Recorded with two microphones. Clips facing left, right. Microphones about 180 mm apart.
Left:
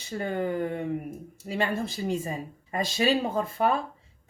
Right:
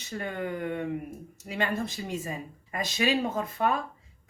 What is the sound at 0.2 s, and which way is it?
Speech, 30° left (ahead or behind).